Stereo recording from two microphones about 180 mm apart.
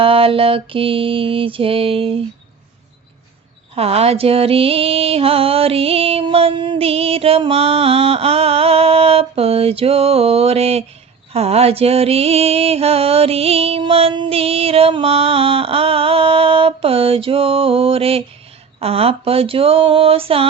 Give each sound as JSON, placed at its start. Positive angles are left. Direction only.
{"t": 0.0, "sound": "music", "side_deg": -30}
{"t": 3.8, "sound": "music", "side_deg": -35}